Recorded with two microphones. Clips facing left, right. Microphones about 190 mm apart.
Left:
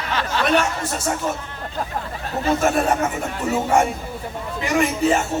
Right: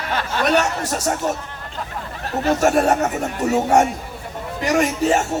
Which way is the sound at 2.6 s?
40° right (ahead or behind).